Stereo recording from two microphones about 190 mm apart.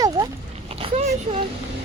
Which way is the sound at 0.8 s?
30° right (ahead or behind).